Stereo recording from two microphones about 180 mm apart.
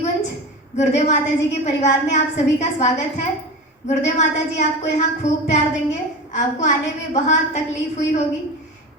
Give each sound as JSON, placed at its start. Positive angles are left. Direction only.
{"t": 0.8, "sound": "a woman's voice", "side_deg": 40}